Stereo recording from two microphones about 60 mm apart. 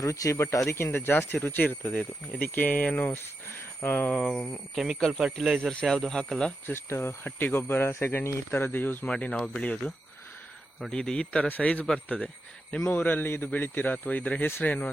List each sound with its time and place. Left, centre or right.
0.0 s speech: left
0.7 s speech: left
4.2 s speech: centre
5.8 s speech: centre
6.9 s speech: left
7.3 s speech: left
9.0 s speech: centre
10.9 s speech: centre
11.4 s speech: left